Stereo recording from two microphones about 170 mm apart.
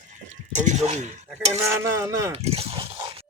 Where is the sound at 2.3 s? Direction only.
35° right (ahead or behind).